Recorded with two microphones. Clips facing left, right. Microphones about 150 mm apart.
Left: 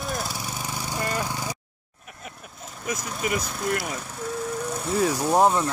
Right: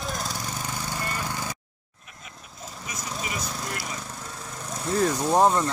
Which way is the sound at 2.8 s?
55° left (ahead or behind).